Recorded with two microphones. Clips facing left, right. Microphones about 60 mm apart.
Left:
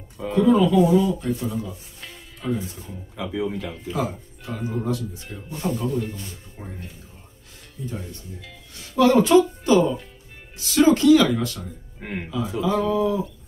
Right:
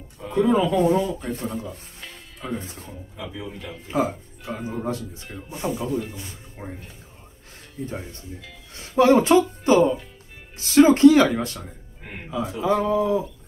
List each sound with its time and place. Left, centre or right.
0.3 s speech: right
0.7 s speech: right
1.2 s speech: centre
2.0 s music: centre
2.6 s speech: right
3.5 s speech: centre
3.8 s speech: right
4.5 s speech: centre
4.8 s speech: right
5.7 s speech: centre
6.6 s speech: centre
7.8 s speech: right